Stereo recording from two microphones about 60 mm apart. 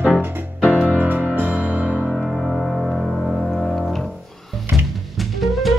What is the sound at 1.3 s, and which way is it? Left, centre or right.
Music, right.